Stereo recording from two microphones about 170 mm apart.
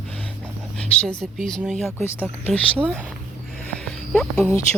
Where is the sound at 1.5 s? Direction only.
5° left (ahead or behind).